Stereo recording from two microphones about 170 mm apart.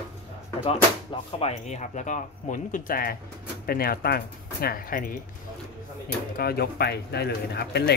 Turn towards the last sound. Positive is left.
turn(degrees=75)  # may be behind; listen again after turning